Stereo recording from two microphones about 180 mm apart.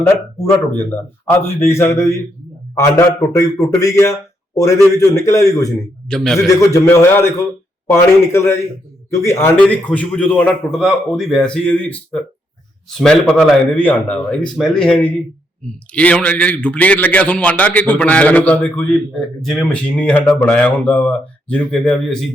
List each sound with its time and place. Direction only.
0.9 s a man's voice: 10° left (ahead or behind)
6.1 s speech: centre (ahead or behind)
6.6 s a man's voice: 15° left (ahead or behind)